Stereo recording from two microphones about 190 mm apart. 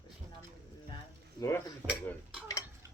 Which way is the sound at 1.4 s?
15° left (ahead or behind).